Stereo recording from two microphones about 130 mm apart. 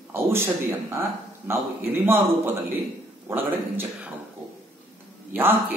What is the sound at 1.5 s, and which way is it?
A man's voice, 15° right (ahead or behind).